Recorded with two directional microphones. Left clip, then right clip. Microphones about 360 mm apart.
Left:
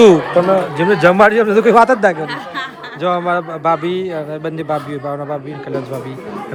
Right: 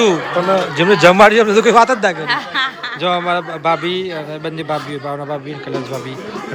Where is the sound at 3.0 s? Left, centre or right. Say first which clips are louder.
Left 1 dB; centre.